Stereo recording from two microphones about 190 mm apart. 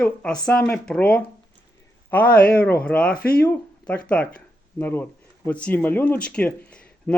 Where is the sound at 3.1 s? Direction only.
50° left (ahead or behind).